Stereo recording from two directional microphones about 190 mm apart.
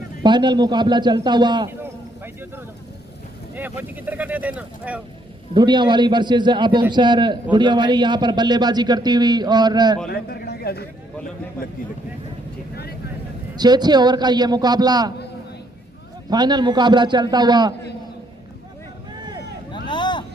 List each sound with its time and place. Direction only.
0.2 s a man's voice: 25° right (ahead or behind)
1.8 s a sound: 10° right (ahead or behind)
3.5 s speech: 10° right (ahead or behind)
5.5 s a man's voice: 25° right (ahead or behind)
10.1 s a man's voice: 55° left (ahead or behind)
12.7 s vehicle: 55° left (ahead or behind)
13.6 s a man's voice: 20° right (ahead or behind)
16.3 s a man's voice: 20° right (ahead or behind)
19.9 s a sound: 25° left (ahead or behind)